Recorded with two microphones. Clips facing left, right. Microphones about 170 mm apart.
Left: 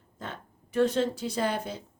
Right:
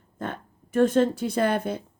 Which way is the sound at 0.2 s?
50° right (ahead or behind).